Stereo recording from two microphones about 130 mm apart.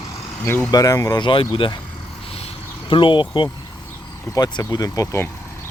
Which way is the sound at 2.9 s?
40° left (ahead or behind).